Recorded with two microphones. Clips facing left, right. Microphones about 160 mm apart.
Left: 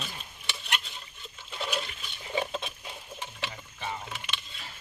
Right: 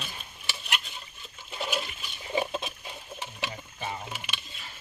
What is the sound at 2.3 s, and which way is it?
Patter, 15° right (ahead or behind).